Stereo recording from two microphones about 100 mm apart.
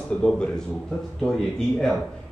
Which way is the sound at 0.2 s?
10° left (ahead or behind).